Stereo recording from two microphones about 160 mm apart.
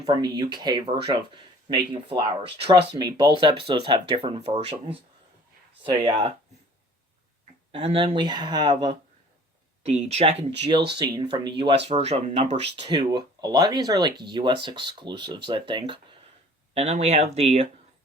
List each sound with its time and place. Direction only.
0.0 s speech: 25° right (ahead or behind)
6.1 s speech: 35° right (ahead or behind)
7.7 s speech: 40° right (ahead or behind)
9.8 s speech: 45° right (ahead or behind)
10.7 s speech: 30° right (ahead or behind)
12.7 s speech: 25° right (ahead or behind)